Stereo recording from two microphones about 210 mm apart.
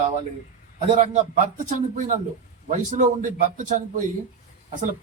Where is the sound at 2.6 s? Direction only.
35° right (ahead or behind).